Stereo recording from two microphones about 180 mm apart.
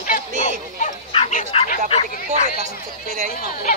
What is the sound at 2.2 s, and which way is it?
Speech, 40° right (ahead or behind).